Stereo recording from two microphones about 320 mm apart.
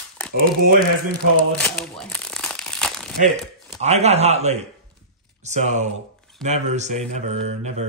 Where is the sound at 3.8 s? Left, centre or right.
Centre.